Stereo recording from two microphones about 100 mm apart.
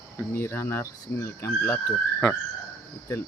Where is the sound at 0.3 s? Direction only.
25° left (ahead or behind).